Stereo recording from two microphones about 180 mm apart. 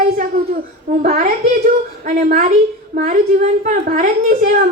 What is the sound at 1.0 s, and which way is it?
A woman's voice, 45° right (ahead or behind).